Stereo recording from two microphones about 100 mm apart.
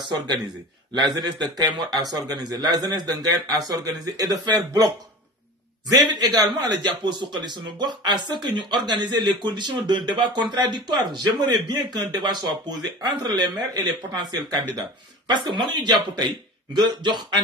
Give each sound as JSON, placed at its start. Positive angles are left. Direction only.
{"t": 0.0, "sound": "a man's voice", "side_deg": -50}
{"t": 5.9, "sound": "a man's voice", "side_deg": -45}